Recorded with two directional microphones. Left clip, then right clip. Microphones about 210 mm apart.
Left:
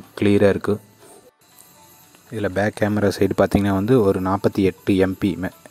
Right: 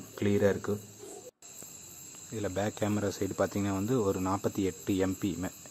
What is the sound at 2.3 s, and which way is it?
Speech, 30° left (ahead or behind).